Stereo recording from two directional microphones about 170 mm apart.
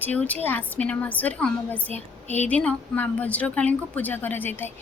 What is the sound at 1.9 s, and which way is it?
Speech, 40° right (ahead or behind).